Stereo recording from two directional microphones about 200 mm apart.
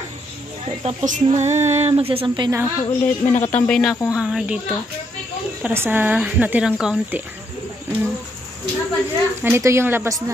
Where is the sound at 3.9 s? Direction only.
15° left (ahead or behind).